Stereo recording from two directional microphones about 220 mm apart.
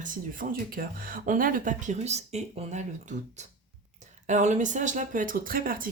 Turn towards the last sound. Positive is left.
turn(degrees=-40)  # may be behind; listen again after turning